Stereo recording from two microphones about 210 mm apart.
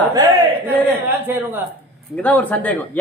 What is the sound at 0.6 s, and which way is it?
Speech, 10° right (ahead or behind).